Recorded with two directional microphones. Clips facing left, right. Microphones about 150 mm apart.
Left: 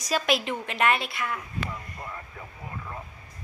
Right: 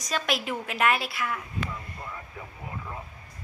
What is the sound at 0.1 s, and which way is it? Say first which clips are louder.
A woman's voice: left 3 dB; centre (ahead or behind).